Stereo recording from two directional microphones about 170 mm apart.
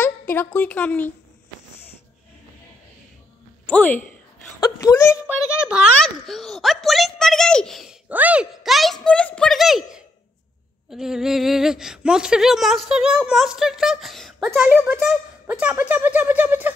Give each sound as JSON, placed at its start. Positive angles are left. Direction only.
{"t": 0.0, "sound": "a woman's voice", "side_deg": 15}
{"t": 3.6, "sound": "a woman's voice", "side_deg": 10}
{"t": 4.6, "sound": "speech", "side_deg": 20}
{"t": 5.2, "sound": "a woman's voice", "side_deg": -5}